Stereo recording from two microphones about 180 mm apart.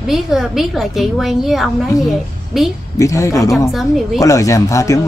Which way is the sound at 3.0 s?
15° left (ahead or behind).